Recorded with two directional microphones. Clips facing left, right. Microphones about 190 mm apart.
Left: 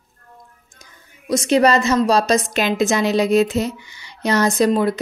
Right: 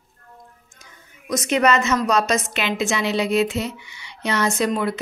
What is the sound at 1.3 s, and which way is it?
A woman's voice, 30° left (ahead or behind).